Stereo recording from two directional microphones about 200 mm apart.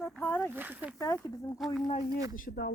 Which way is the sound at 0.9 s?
10° left (ahead or behind).